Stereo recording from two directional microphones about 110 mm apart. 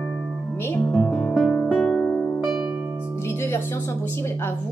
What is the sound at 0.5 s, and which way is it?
Music, 20° left (ahead or behind).